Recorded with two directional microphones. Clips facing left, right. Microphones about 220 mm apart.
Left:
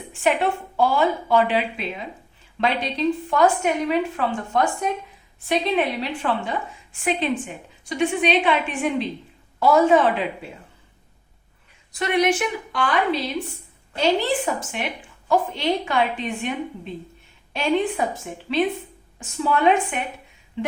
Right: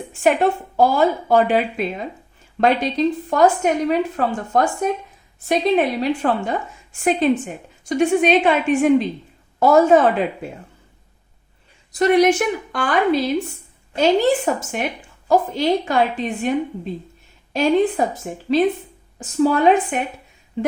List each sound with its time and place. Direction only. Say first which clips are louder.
0.1 s a woman's voice: right 4 dB; 45° right (ahead or behind)
11.9 s a woman's voice: right 6 dB; 40° right (ahead or behind)
20.6 s a sound: right 5 dB; 45° right (ahead or behind)